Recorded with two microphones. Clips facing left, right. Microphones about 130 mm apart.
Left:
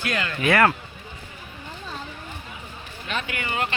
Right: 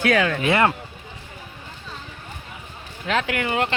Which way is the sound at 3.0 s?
90° right.